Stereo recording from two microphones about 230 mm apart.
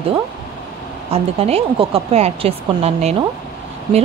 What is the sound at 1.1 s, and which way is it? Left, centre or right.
Speech, right.